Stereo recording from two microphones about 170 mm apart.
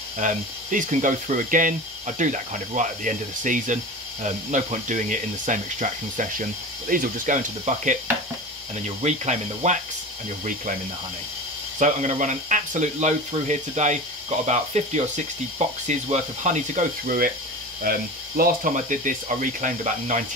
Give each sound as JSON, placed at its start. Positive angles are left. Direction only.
{"t": 0.2, "sound": "speech", "side_deg": -50}
{"t": 11.8, "sound": "speech", "side_deg": -45}